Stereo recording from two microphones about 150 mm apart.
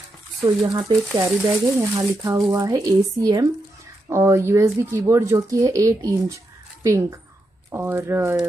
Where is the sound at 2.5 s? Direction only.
25° right (ahead or behind).